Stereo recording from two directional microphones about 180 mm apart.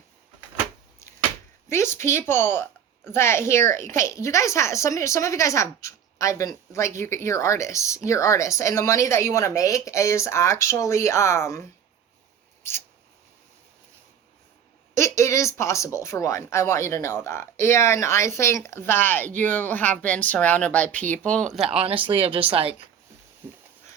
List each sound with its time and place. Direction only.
1.7 s a woman's voice: 15° left (ahead or behind)
14.9 s a woman's voice: 15° left (ahead or behind)
21.6 s speech: 35° right (ahead or behind)